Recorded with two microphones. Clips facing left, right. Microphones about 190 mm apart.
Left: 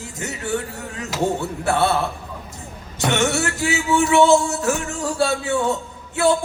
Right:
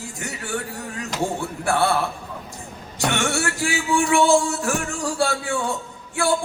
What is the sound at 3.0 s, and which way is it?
Music, 20° left (ahead or behind).